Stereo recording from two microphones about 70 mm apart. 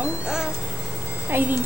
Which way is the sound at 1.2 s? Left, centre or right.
Right.